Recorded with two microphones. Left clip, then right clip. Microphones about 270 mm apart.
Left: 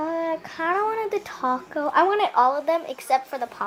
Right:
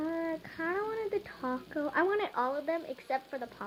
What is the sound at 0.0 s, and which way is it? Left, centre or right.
Speech, centre.